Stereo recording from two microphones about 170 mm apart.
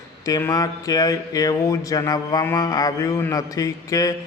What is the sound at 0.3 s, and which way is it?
Speech, 20° left (ahead or behind).